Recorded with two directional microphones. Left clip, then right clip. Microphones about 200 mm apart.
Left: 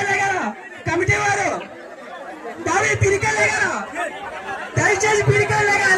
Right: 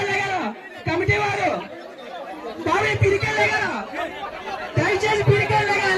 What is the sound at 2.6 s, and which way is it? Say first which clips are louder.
A man's voice: left 2 dB; 50° left (ahead or behind).